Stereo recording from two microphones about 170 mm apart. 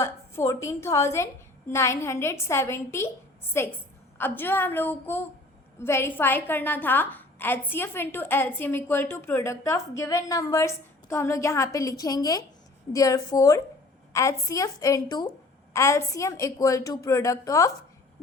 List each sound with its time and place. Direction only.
0.0 s a woman's voice: 15° left (ahead or behind)